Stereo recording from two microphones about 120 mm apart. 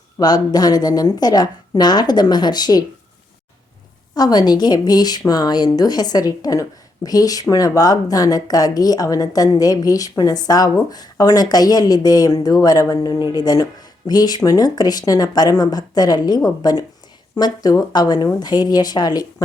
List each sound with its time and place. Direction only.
0.2 s a woman's voice: 35° left (ahead or behind)
4.1 s a woman's voice: 35° left (ahead or behind)